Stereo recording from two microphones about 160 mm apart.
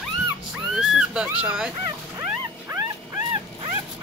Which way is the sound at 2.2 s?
15° right (ahead or behind).